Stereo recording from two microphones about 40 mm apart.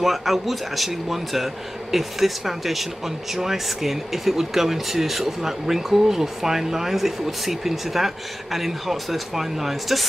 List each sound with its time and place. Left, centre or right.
0.0 s speech: centre